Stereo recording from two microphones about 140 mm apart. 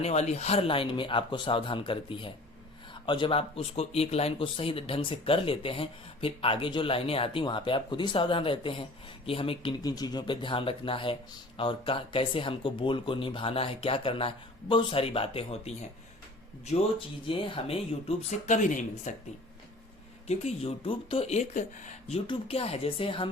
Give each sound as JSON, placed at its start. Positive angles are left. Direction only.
{"t": 0.0, "sound": "speech", "side_deg": 50}
{"t": 9.8, "sound": "speech", "side_deg": 30}
{"t": 17.2, "sound": "speech", "side_deg": 40}
{"t": 18.3, "sound": "speech", "side_deg": 60}
{"t": 20.2, "sound": "speech", "side_deg": 50}
{"t": 22.3, "sound": "speech", "side_deg": 45}